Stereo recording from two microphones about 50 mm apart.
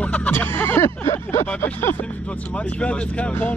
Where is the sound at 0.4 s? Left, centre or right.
Left.